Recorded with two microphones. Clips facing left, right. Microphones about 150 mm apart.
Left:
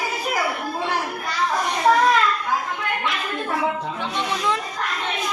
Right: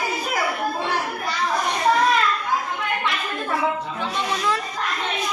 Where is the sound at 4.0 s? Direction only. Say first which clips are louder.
Right 1 dB; 20° left (ahead or behind).